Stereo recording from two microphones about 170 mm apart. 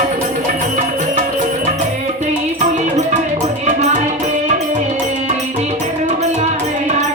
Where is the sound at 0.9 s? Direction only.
45° right (ahead or behind).